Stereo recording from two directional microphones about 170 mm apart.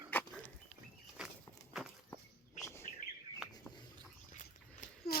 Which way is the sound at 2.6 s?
15° left (ahead or behind).